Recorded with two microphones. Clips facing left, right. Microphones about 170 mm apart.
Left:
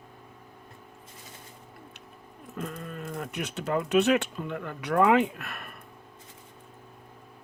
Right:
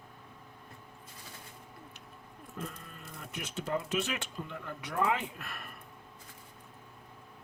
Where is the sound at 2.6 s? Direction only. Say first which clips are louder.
Left 8 dB; 65° left (ahead or behind).